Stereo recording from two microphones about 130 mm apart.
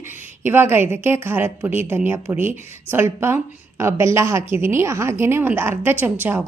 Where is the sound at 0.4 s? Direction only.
15° right (ahead or behind).